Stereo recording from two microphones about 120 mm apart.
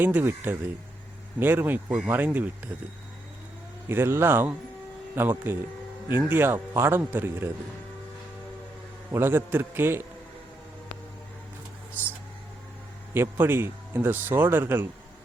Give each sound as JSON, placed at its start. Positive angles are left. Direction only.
{"t": 0.0, "sound": "speech", "side_deg": -15}
{"t": 3.8, "sound": "speech", "side_deg": -20}
{"t": 9.1, "sound": "speech", "side_deg": -20}
{"t": 13.3, "sound": "speech", "side_deg": -20}